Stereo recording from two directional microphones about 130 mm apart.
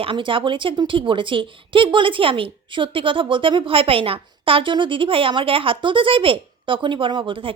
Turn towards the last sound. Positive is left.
turn(degrees=-40)  # may be behind; listen again after turning